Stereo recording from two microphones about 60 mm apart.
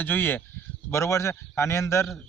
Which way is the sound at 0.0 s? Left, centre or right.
Left.